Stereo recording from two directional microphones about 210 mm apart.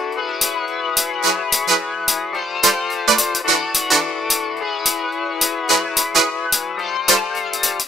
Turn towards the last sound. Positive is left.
turn(degrees=0)  # may be behind; listen again after turning